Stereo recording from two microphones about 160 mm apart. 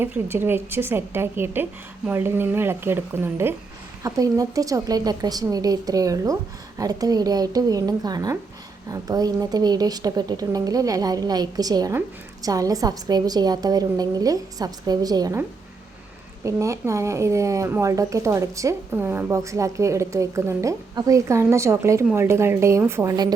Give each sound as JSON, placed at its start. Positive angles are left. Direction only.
{"t": 0.0, "sound": "a woman's voice", "side_deg": -15}